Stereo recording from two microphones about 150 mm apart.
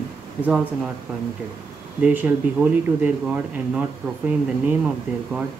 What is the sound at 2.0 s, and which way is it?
Speech, 10° right (ahead or behind).